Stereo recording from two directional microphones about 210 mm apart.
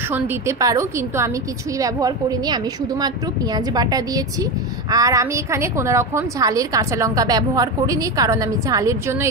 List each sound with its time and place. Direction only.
0.1 s a woman's voice: 10° right (ahead or behind)